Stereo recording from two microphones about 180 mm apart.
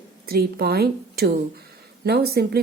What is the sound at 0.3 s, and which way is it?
A woman's voice, 60° right (ahead or behind).